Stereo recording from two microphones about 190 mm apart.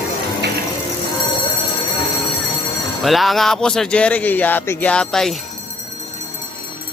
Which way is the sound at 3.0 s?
Centre (ahead or behind).